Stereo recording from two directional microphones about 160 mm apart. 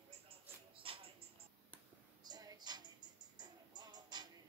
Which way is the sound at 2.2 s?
25° right (ahead or behind).